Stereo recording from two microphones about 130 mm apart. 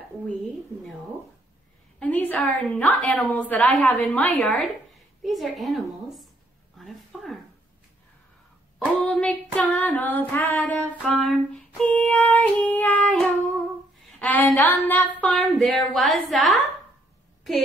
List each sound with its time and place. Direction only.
2.0 s a woman's voice: 10° left (ahead or behind)
6.8 s a sound: centre (ahead or behind)
8.7 s a woman's voice: 10° left (ahead or behind)
11.0 s a woman's voice: centre (ahead or behind)
12.0 s a woman's voice: 15° left (ahead or behind)